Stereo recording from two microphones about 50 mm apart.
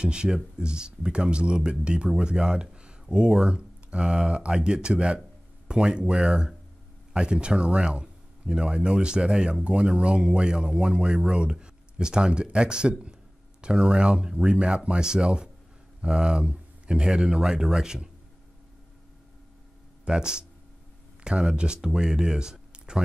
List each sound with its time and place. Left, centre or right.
0.0 s speech: centre
20.1 s speech: centre